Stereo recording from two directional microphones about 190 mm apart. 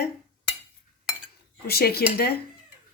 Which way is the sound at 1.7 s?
55° left (ahead or behind).